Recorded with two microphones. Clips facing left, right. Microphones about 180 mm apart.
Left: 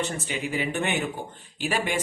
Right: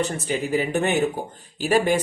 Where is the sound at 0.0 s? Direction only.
40° right (ahead or behind).